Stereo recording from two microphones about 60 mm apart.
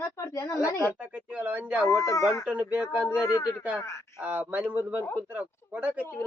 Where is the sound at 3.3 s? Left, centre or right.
Left.